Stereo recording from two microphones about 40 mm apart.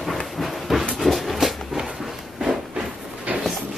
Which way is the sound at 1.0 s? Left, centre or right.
Centre.